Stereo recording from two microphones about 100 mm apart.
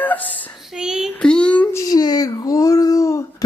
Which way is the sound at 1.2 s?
10° left (ahead or behind).